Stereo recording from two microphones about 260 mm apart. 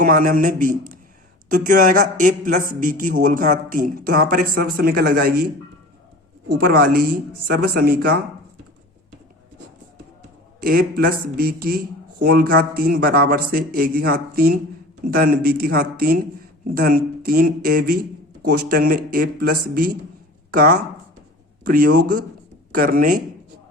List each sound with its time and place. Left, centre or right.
0.0 s speech: right
6.6 s speech: right
10.6 s speech: right